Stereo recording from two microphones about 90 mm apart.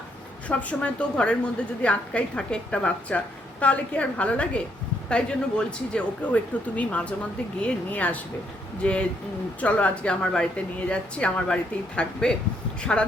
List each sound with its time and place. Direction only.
0.4 s a woman's voice: 15° left (ahead or behind)